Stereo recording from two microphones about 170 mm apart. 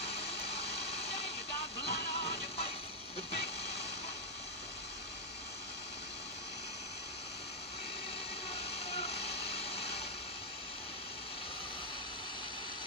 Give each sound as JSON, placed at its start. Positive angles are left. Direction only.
{"t": 0.1, "sound": "a sound", "side_deg": 35}
{"t": 1.9, "sound": "music", "side_deg": 35}
{"t": 3.2, "sound": "vehicle", "side_deg": 40}
{"t": 8.5, "sound": "vehicle", "side_deg": 35}